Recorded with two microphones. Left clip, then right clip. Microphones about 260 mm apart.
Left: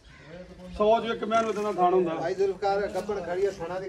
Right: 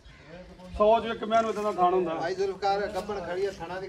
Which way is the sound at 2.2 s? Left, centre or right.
Centre.